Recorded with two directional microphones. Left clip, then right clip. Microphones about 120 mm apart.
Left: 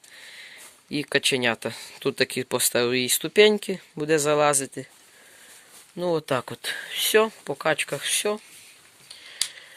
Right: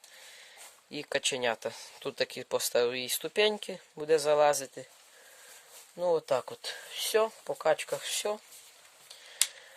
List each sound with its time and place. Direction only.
0.3 s speech: 25° right (ahead or behind)
6.0 s speech: 20° right (ahead or behind)
8.0 s speech: 35° right (ahead or behind)